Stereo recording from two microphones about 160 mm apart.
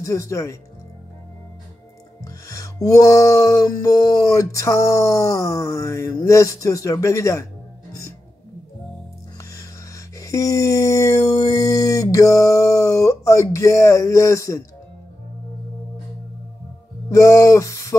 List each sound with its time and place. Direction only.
0.0 s music: 20° left (ahead or behind)
2.2 s music: 20° left (ahead or behind)
9.4 s music: 20° left (ahead or behind)
17.1 s music: 20° left (ahead or behind)